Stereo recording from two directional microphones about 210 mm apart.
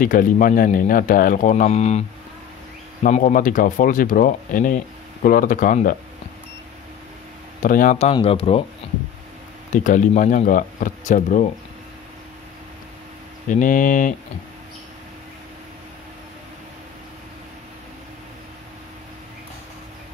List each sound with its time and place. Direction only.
0.0 s speech: 40° left (ahead or behind)
7.6 s speech: 40° left (ahead or behind)
9.7 s speech: 35° left (ahead or behind)
13.5 s speech: 40° left (ahead or behind)